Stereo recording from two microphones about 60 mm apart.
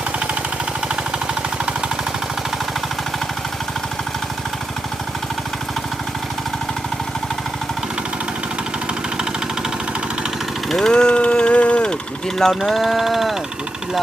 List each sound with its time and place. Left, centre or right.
10.7 s vehicle: centre
10.9 s a sound: centre
12.4 s speech: centre